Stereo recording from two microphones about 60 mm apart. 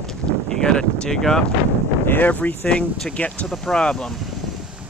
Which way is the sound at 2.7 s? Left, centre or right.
Centre.